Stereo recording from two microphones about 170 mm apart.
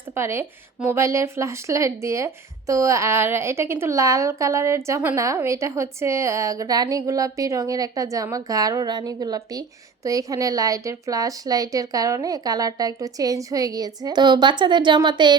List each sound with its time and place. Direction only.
0.1 s speech: 15° right (ahead or behind)